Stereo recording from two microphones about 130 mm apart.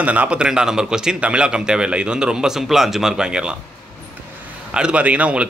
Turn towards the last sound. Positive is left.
turn(degrees=-10)  # may be behind; listen again after turning